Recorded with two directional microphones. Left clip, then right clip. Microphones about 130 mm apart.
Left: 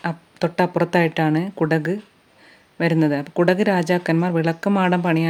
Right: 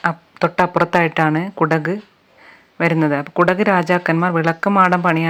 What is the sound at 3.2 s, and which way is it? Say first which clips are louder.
Speech: right 3 dB; 10° left (ahead or behind).